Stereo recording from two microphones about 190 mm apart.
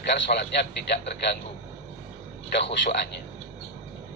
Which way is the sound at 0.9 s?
60° left (ahead or behind).